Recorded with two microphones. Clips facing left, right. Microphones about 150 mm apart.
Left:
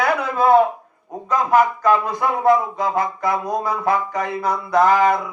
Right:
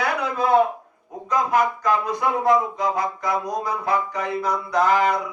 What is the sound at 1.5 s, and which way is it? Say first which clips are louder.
Music: left 7 dB; 50° left (ahead or behind).